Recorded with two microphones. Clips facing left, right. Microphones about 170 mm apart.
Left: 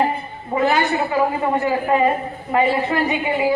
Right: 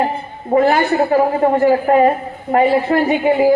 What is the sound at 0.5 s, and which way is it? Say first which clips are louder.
A woman's voice: right 5 dB; 50° right (ahead or behind).